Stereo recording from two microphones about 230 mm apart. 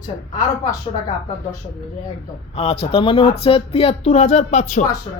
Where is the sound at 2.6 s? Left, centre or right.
Left.